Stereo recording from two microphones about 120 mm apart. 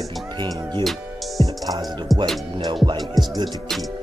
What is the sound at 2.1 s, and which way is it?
Music, centre (ahead or behind).